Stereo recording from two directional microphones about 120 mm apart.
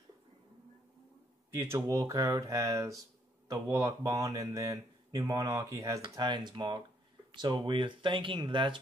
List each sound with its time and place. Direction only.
1.5 s speech: 20° right (ahead or behind)
6.0 s speech: 40° right (ahead or behind)